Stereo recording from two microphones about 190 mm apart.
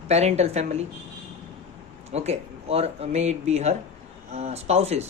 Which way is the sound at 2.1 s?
35° right (ahead or behind).